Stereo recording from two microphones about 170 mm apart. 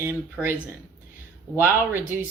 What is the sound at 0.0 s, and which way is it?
Speech, 15° right (ahead or behind).